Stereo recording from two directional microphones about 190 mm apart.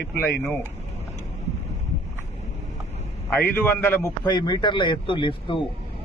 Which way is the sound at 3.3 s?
10° left (ahead or behind).